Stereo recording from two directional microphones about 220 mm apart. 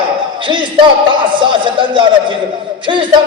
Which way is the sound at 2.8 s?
20° right (ahead or behind).